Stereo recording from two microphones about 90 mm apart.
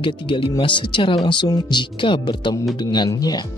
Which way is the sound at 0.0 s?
75° left (ahead or behind).